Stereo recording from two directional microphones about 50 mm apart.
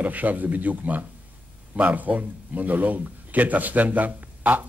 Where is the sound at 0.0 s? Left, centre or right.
Right.